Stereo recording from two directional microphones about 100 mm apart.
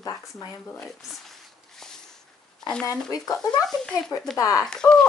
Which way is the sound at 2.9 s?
35° left (ahead or behind).